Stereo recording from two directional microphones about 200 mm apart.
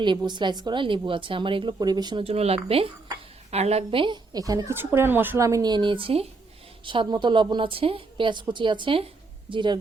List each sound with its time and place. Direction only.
0.0 s speech: 20° right (ahead or behind)